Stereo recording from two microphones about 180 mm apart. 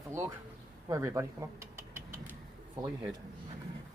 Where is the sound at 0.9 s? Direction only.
15° right (ahead or behind).